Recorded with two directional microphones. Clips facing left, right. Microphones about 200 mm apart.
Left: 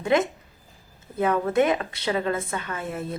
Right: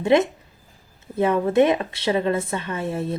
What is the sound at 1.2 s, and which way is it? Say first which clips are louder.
Speech: right 4 dB; 25° right (ahead or behind).